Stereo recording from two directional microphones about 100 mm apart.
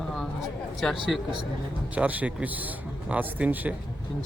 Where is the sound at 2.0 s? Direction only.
15° right (ahead or behind).